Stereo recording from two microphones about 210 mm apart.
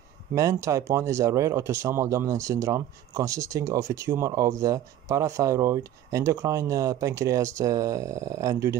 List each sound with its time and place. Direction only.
0.3 s speech: 15° right (ahead or behind)